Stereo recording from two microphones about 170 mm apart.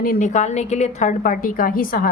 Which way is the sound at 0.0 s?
55° left (ahead or behind).